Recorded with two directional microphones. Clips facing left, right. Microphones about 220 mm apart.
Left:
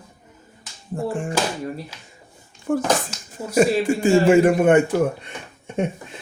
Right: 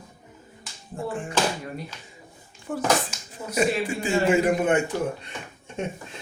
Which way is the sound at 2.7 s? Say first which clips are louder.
Left 4 dB; 45° left (ahead or behind).